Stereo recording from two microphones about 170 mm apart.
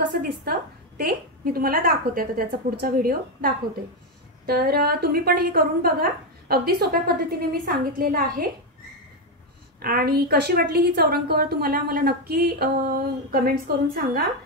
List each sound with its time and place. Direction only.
0.1 s a woman's voice: 60° right (ahead or behind)
9.8 s a woman's voice: 60° right (ahead or behind)